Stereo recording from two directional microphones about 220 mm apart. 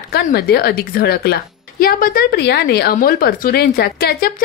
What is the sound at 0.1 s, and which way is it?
A woman's voice, 45° left (ahead or behind).